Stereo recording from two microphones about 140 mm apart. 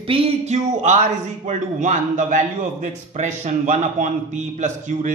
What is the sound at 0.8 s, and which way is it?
A man's voice, 60° right (ahead or behind).